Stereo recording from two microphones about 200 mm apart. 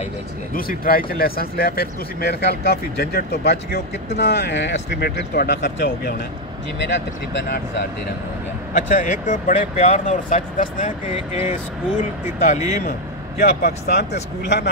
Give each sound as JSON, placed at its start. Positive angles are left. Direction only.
{"t": 0.6, "sound": "speech", "side_deg": 45}
{"t": 8.7, "sound": "speech", "side_deg": 35}
{"t": 13.4, "sound": "speech", "side_deg": 50}